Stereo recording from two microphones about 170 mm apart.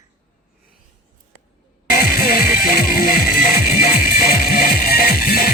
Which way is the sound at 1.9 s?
60° left (ahead or behind).